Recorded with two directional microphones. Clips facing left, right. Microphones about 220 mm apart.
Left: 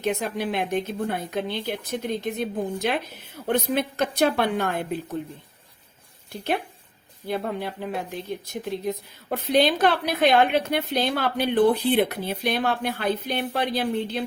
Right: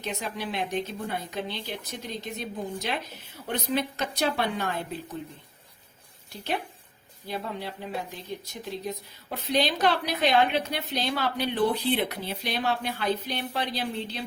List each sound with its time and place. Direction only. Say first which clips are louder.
0.0 s a woman's voice: left 7 dB; 55° left (ahead or behind)
6.3 s a woman's voice: left 5 dB; 55° left (ahead or behind)